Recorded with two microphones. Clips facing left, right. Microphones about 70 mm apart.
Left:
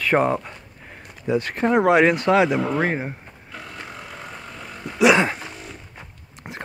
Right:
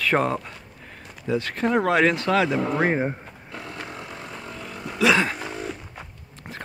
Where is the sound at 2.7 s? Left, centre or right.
Centre.